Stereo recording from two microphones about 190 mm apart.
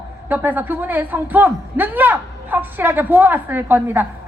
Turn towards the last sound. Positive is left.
turn(degrees=-10)  # may be behind; listen again after turning